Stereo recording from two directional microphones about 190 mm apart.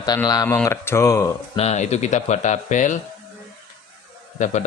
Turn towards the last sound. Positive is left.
turn(degrees=40)  # may be behind; listen again after turning